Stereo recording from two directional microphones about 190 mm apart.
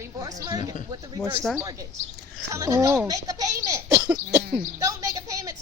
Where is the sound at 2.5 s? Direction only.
15° right (ahead or behind).